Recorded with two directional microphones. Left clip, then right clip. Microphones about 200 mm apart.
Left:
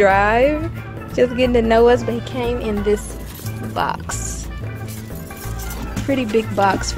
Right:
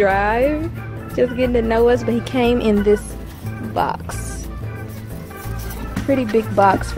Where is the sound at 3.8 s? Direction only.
15° right (ahead or behind).